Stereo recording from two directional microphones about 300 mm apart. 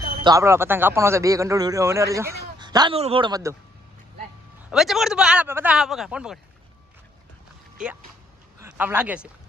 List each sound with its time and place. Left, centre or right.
0.2 s speech: centre
4.7 s speech: centre
8.6 s speech: centre